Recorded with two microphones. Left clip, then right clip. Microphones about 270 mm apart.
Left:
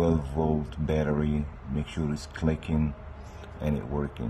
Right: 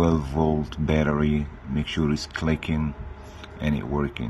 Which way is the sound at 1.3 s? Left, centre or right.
Centre.